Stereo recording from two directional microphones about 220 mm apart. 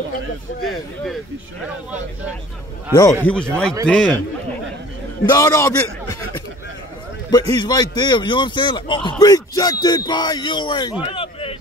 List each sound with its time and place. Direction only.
2.9 s speech: 15° left (ahead or behind)
5.2 s a man's voice: 15° left (ahead or behind)